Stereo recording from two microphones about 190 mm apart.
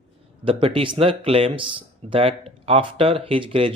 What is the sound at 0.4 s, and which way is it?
Speech, 30° right (ahead or behind).